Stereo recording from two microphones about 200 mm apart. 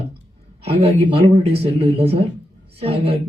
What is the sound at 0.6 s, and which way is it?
Speech, 30° right (ahead or behind).